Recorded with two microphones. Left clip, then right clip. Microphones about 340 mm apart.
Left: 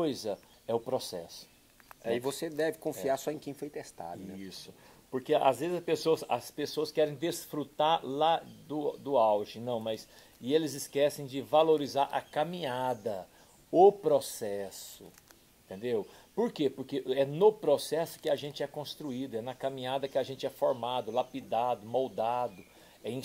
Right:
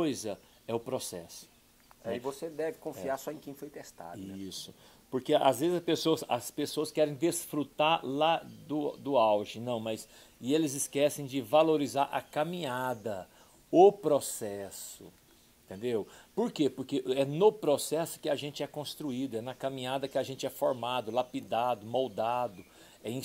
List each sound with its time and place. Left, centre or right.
0.0 s speech: right
2.0 s speech: left
5.1 s speech: right